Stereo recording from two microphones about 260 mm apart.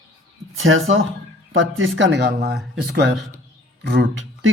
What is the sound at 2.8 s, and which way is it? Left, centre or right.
Speech, right.